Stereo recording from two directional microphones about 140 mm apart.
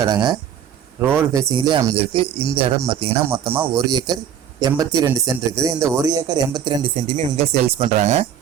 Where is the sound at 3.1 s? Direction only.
15° right (ahead or behind).